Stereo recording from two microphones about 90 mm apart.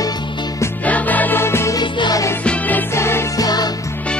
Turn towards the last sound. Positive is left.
turn(degrees=45)  # may be behind; listen again after turning